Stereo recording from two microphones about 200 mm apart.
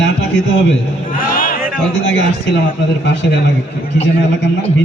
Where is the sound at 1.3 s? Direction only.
45° left (ahead or behind).